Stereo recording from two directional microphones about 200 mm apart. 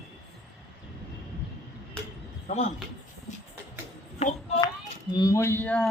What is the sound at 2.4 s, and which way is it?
Speech, 35° left (ahead or behind).